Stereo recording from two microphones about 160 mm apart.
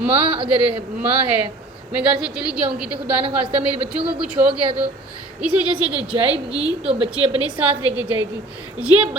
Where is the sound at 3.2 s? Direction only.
35° right (ahead or behind).